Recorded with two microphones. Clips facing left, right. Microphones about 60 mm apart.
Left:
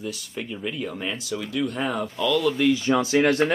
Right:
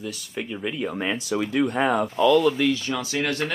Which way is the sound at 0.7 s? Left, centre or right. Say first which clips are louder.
Right 2 dB; centre.